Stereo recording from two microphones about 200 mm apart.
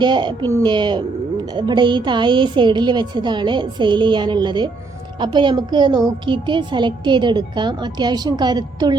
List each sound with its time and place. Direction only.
0.0 s a woman's voice: 20° right (ahead or behind)